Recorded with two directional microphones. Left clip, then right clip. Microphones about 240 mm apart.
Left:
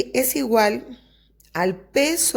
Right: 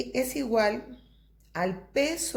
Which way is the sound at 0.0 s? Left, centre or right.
Left.